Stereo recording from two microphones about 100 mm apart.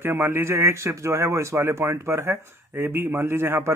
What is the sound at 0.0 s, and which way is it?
Speech, 20° right (ahead or behind).